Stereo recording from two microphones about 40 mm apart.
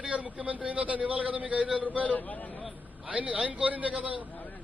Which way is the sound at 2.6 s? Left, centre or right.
Right.